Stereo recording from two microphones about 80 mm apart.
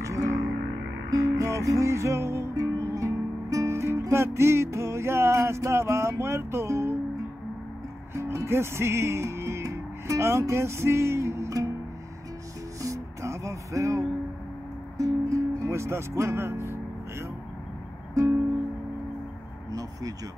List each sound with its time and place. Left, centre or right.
0.0 s music: right
8.1 s music: right
12.8 s music: right
19.7 s a sound: right